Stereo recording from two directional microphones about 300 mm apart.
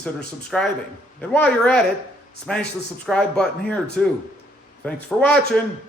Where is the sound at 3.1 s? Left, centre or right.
Centre.